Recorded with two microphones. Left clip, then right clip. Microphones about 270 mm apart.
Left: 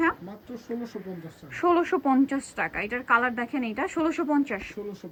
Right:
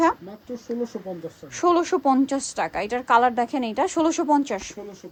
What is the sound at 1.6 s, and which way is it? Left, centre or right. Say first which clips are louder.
A woman's voice: right 3 dB; centre.